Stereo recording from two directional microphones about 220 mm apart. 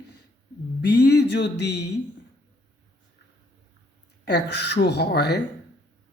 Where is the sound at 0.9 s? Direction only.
50° left (ahead or behind).